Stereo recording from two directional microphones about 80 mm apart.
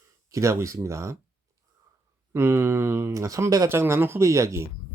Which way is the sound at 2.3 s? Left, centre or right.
Right.